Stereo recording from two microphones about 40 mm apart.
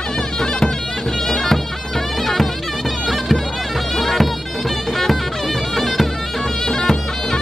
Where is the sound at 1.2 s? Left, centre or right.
Centre.